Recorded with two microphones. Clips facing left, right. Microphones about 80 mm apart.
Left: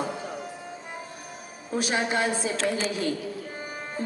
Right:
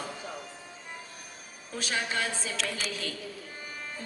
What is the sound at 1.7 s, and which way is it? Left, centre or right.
Speech, left.